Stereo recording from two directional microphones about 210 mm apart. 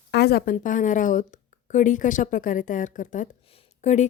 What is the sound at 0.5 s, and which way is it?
A woman's voice, 40° left (ahead or behind).